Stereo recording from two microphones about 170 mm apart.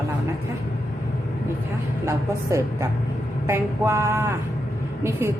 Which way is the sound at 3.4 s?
15° right (ahead or behind).